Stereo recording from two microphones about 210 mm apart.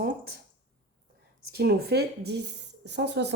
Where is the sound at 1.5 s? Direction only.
50° right (ahead or behind).